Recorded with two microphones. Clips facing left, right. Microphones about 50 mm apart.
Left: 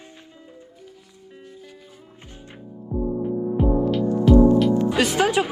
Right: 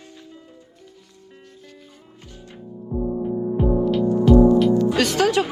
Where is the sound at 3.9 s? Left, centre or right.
Centre.